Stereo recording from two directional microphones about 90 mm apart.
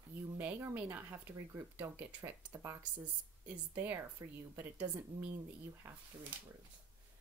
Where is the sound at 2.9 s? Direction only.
15° right (ahead or behind).